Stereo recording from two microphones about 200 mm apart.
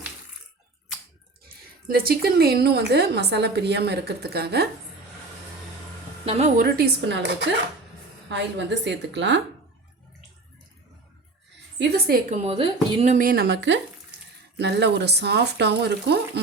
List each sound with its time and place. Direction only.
1.9 s a woman's voice: 50° right (ahead or behind)
6.6 s speech: 50° right (ahead or behind)
11.8 s a woman's voice: 50° right (ahead or behind)
12.4 s speech: 30° right (ahead or behind); by 16.4 s 55° right (ahead or behind)